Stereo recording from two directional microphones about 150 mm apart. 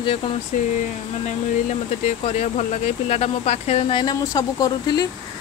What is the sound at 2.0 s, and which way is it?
Speech, 50° left (ahead or behind).